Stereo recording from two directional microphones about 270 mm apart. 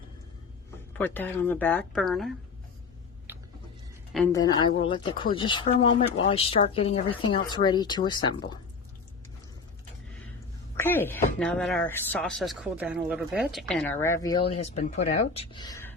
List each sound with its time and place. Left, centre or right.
0.9 s speech: centre
3.3 s a sound: centre
4.3 s speech: centre
10.8 s speech: centre